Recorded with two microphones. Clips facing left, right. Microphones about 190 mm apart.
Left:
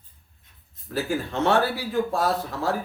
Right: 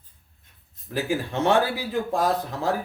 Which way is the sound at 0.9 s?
15° right (ahead or behind).